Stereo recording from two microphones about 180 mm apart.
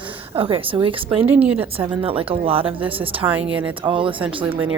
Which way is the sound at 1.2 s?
10° right (ahead or behind).